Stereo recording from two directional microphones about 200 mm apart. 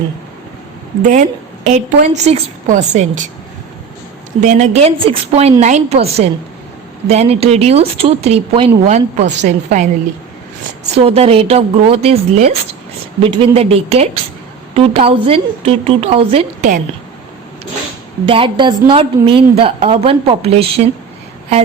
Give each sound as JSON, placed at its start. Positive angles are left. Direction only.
{"t": 1.0, "sound": "a woman's voice", "side_deg": -35}
{"t": 4.4, "sound": "speech", "side_deg": -35}
{"t": 10.9, "sound": "a woman's voice", "side_deg": -30}
{"t": 18.3, "sound": "a woman's voice", "side_deg": -25}